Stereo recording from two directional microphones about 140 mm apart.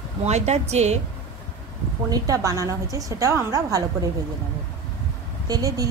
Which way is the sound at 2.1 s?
25° right (ahead or behind).